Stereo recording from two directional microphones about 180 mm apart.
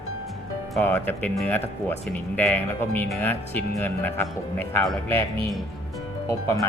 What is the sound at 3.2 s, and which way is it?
Speech, 10° left (ahead or behind).